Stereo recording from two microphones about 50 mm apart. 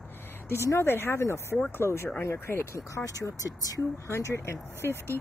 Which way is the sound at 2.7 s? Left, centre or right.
Left.